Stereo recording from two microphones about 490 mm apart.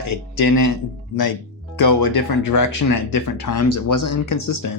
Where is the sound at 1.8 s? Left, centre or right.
Left.